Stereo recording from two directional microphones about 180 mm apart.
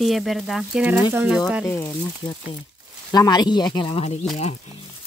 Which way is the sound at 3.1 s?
20° left (ahead or behind).